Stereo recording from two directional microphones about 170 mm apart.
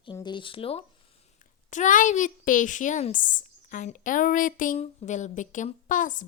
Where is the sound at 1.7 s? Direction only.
50° left (ahead or behind).